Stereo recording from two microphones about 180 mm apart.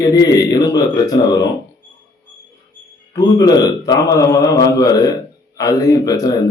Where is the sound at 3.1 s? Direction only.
20° left (ahead or behind).